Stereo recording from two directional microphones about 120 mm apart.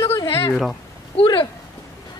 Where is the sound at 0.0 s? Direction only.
25° left (ahead or behind).